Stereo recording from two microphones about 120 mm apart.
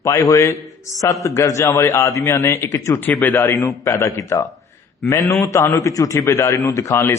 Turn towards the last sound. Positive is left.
turn(degrees=20)  # may be behind; listen again after turning